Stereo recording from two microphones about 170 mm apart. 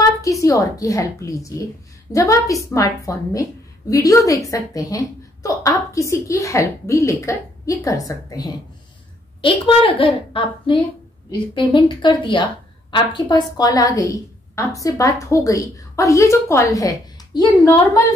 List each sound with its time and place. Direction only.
0.0 s a woman's voice: 20° left (ahead or behind)
9.4 s a woman's voice: 30° left (ahead or behind)